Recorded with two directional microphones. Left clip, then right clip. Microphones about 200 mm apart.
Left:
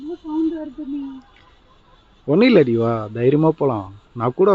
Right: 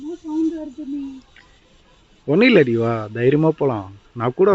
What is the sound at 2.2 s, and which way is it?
Speech, 5° left (ahead or behind).